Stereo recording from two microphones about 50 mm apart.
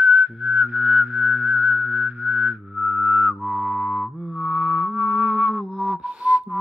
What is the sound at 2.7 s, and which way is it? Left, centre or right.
Music, centre.